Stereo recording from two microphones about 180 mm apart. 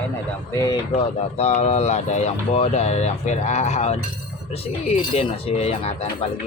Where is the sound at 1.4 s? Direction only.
35° left (ahead or behind).